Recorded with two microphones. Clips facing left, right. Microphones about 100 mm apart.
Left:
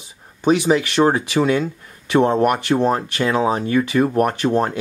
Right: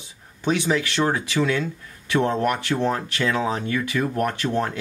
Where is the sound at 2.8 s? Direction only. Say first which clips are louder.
Left 5 dB; 35° left (ahead or behind).